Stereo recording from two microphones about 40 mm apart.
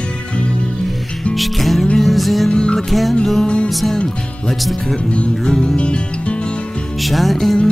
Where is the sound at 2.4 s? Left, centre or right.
Left.